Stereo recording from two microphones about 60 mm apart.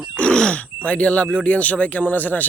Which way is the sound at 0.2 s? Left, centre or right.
Centre.